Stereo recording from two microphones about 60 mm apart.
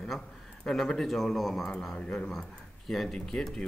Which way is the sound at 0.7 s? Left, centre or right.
Centre.